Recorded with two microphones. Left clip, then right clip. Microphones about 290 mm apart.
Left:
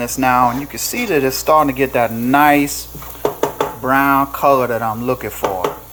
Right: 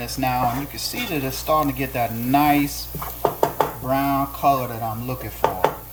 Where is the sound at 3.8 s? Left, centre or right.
Left.